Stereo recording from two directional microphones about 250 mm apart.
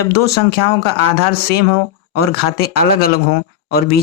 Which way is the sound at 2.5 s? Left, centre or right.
Left.